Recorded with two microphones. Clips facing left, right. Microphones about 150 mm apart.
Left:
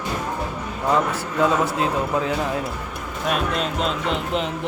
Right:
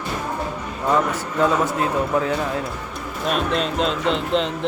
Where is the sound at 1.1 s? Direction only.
15° left (ahead or behind).